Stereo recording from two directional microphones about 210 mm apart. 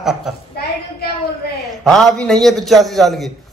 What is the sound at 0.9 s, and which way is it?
Speech, 50° left (ahead or behind).